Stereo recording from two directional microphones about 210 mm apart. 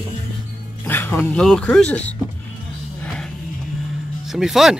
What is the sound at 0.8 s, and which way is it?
Speech, 10° left (ahead or behind).